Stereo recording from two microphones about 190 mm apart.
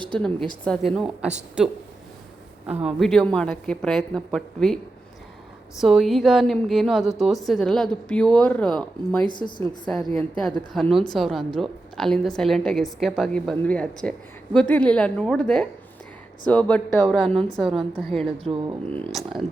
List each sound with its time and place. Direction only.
0.1 s a woman's voice: 5° left (ahead or behind)
2.8 s a woman's voice: centre (ahead or behind)
5.8 s a woman's voice: centre (ahead or behind)
9.3 s a woman's voice: 25° left (ahead or behind)
9.8 s a woman's voice: 5° left (ahead or behind)